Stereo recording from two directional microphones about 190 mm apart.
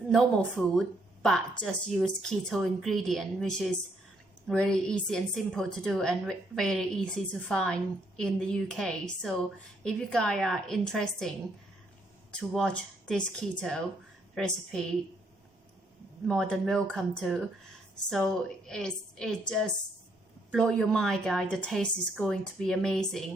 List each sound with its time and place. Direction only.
0.1 s a woman's voice: centre (ahead or behind)
16.2 s a woman's voice: centre (ahead or behind)